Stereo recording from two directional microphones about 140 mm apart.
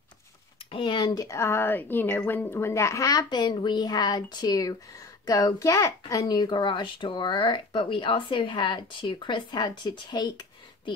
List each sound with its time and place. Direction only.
0.7 s speech: 35° left (ahead or behind)